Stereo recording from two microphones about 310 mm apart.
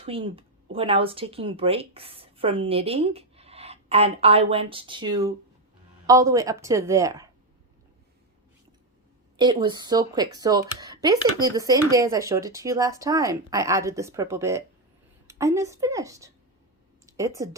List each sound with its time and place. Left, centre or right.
0.0 s speech: centre
9.4 s speech: centre